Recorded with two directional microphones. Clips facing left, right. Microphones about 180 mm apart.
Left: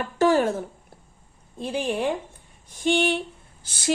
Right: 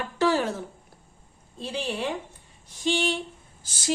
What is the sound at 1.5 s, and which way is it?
Speech, 50° left (ahead or behind).